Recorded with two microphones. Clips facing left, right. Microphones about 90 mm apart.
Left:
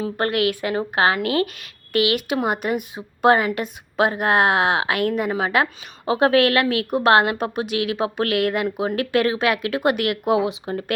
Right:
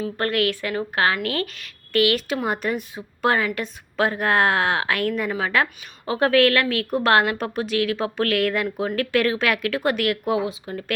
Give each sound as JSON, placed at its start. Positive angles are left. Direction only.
{"t": 0.0, "sound": "a woman's voice", "side_deg": 15}
{"t": 8.6, "sound": "a woman's voice", "side_deg": 25}
{"t": 9.0, "sound": "a woman's voice", "side_deg": 10}